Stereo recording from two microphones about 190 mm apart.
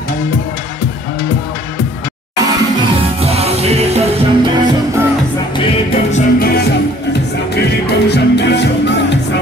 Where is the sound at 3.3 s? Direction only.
35° right (ahead or behind).